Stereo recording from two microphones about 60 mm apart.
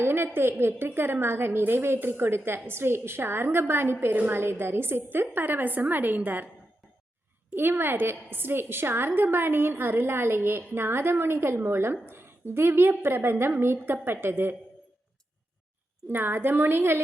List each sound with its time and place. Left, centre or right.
0.0 s a sound: right
0.6 s a woman's voice: right
7.5 s a woman's voice: right
16.0 s a woman's voice: right